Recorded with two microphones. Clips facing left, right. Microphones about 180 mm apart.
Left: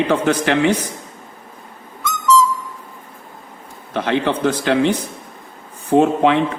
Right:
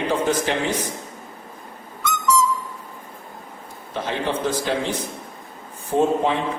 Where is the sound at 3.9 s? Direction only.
70° left (ahead or behind).